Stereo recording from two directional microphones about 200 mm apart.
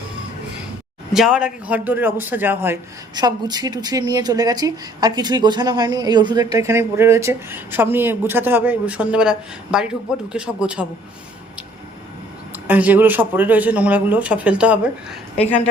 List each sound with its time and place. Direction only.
1.1 s speech: centre (ahead or behind)
3.2 s a man's voice: 20° right (ahead or behind)
12.6 s speech: 10° right (ahead or behind)